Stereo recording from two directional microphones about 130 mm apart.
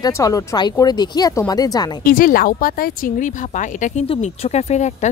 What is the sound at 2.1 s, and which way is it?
Speech, 90° left.